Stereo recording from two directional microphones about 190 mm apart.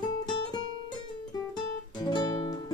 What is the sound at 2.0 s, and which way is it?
Music, 20° left (ahead or behind).